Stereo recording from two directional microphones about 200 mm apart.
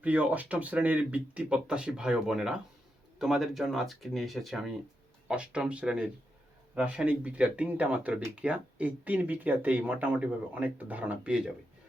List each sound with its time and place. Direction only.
0.0 s speech: 10° right (ahead or behind)